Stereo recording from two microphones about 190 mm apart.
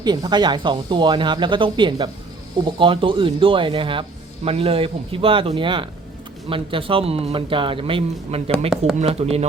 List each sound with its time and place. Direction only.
0.0 s speech: 20° right (ahead or behind)